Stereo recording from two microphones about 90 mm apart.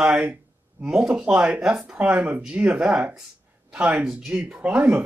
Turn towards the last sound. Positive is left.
turn(degrees=-15)  # may be behind; listen again after turning